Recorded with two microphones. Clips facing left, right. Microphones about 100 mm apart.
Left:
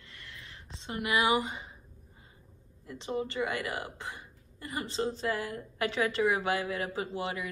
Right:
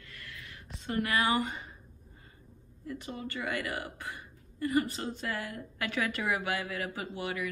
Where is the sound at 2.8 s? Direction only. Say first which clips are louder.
Left 5 dB; 25° left (ahead or behind).